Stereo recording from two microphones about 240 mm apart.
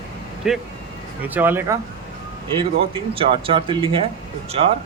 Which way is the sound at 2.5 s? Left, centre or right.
Right.